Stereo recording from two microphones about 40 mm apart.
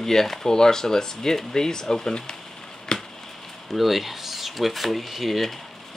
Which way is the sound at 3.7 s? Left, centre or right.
Centre.